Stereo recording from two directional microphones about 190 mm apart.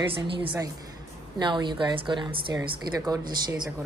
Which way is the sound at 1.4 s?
25° right (ahead or behind).